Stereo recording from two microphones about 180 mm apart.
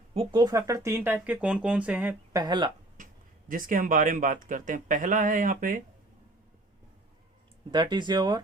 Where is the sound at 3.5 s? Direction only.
50° right (ahead or behind).